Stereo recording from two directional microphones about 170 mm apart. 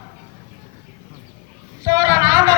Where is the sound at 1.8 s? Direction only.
20° right (ahead or behind).